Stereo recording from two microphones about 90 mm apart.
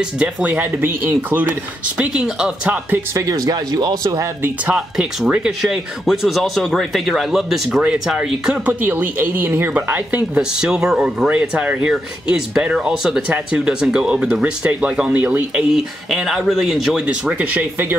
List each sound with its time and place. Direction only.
0.2 s speech: 15° right (ahead or behind)
2.0 s speech: 5° right (ahead or behind)
3.2 s speech: 40° right (ahead or behind)
4.7 s speech: 5° right (ahead or behind)
8.8 s speech: 20° right (ahead or behind)
10.6 s speech: 5° right (ahead or behind)
15.7 s speech: 5° right (ahead or behind)
17.0 s speech: 15° right (ahead or behind)